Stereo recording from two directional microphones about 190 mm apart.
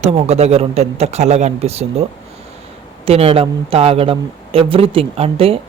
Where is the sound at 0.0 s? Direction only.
35° right (ahead or behind).